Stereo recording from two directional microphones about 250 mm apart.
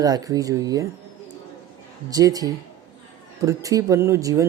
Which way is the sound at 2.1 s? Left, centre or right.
Centre.